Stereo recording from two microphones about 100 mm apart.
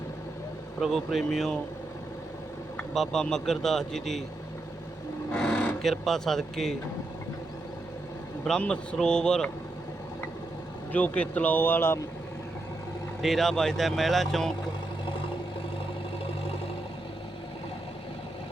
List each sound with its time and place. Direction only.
0.8 s speech: centre (ahead or behind)
2.9 s speech: 5° left (ahead or behind)
5.3 s cattle: 10° left (ahead or behind)
5.8 s speech: 5° left (ahead or behind)
8.4 s a man's voice: 10° left (ahead or behind)
10.9 s speech: 15° left (ahead or behind)
13.2 s speech: centre (ahead or behind)